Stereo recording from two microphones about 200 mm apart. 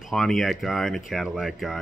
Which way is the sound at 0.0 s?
Centre (ahead or behind).